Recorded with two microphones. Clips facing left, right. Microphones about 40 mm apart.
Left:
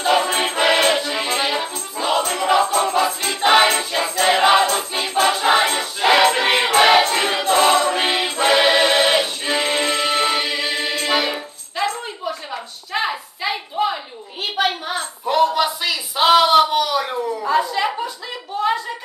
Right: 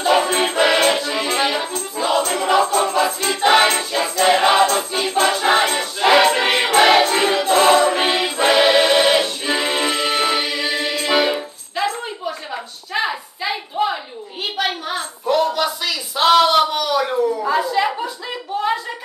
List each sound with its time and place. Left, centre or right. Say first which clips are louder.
0.1 s music: right 1 dB; centre
7.3 s choir: right 2 dB; centre
8.4 s music: right 1 dB; centre
10.5 s a capella: right 1 dB; centre
11.1 s music: right 3 dB; centre
14.6 s a sound: left 2 dB; centre
15.2 s a sound: left 1 dB; centre